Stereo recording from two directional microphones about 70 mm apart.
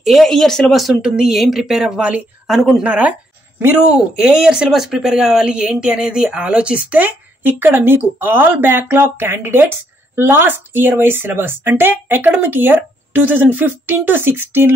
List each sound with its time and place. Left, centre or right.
0.0 s speech: centre
2.8 s a sound: centre
4.2 s speech: centre; by 14.7 s right